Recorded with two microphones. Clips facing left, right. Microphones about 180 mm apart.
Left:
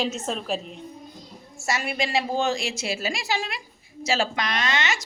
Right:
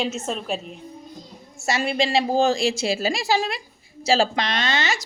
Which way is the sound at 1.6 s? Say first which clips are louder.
Right 4 dB; 25° right (ahead or behind).